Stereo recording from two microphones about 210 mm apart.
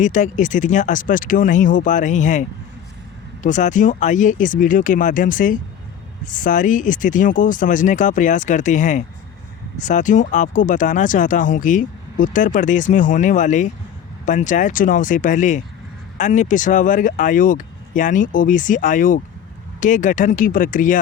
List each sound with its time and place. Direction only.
0.0 s speech: 35° left (ahead or behind)
3.4 s speech: 35° left (ahead or behind)